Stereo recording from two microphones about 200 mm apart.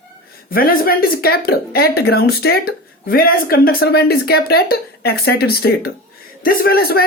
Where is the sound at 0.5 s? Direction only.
45° left (ahead or behind).